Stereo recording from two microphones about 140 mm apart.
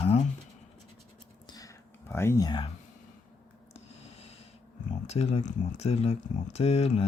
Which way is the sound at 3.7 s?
45° left (ahead or behind).